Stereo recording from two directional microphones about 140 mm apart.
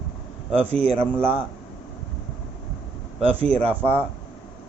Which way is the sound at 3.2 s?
45° right (ahead or behind).